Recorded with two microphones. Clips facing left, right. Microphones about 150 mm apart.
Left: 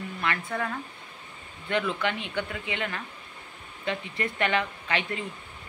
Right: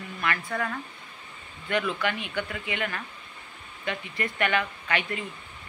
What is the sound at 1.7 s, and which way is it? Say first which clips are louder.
Speech: even; 25° left (ahead or behind).